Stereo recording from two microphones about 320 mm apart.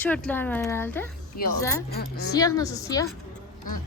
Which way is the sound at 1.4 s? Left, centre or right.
Left.